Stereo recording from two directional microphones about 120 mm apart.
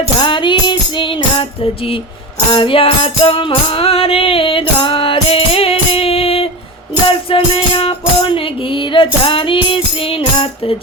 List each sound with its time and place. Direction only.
0.2 s music: 45° left (ahead or behind)